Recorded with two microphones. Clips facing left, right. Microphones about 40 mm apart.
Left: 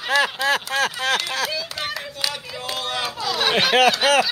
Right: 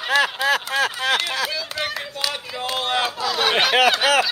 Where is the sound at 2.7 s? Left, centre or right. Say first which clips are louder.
Right 4 dB; right.